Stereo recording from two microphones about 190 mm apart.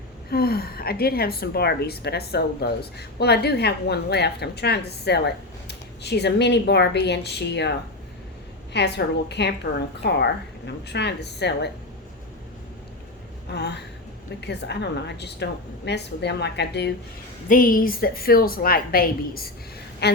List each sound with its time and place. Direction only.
0.3 s speech: 55° left (ahead or behind)
13.5 s speech: 60° left (ahead or behind)
17.5 s a woman's voice: 45° left (ahead or behind)